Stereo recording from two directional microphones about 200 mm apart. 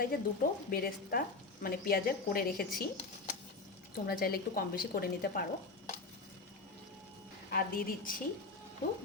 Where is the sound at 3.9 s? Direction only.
50° left (ahead or behind).